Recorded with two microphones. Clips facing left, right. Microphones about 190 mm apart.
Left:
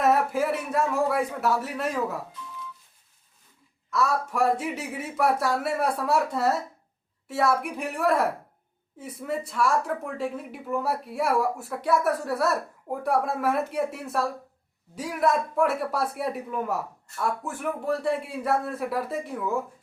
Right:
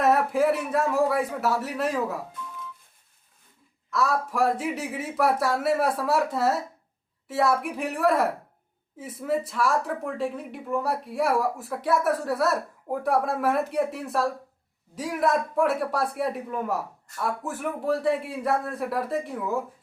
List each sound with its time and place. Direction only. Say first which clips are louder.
0.0 s speech: right 2 dB; centre (ahead or behind)
3.9 s speech: even; centre (ahead or behind)